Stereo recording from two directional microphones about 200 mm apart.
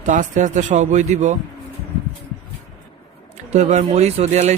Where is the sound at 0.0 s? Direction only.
40° right (ahead or behind).